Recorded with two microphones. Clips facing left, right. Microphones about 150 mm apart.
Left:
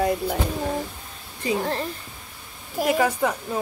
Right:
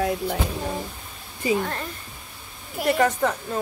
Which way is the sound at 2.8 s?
10° left (ahead or behind).